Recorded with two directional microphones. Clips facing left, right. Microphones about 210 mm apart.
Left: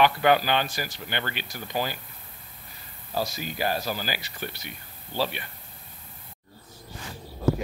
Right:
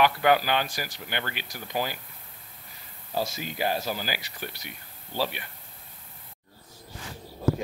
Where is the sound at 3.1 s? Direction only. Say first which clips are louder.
Even; 20° right (ahead or behind).